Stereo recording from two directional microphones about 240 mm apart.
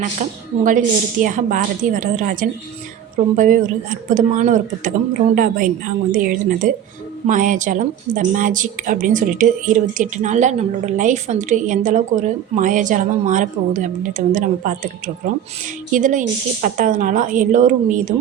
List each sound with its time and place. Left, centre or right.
0.0 s a woman's voice: right